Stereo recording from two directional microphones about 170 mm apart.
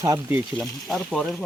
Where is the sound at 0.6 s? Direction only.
Centre (ahead or behind).